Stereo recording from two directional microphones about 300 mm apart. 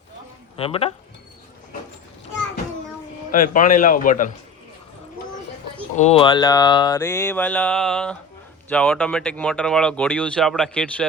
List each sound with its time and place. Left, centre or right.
0.5 s a man's voice: centre
3.3 s a man's voice: left
6.0 s mantra: centre
8.7 s speech: centre